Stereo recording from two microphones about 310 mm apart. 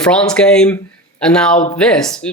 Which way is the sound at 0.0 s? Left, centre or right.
Centre.